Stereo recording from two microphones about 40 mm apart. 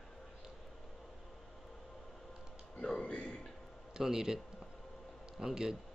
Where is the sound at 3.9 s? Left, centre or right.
Centre.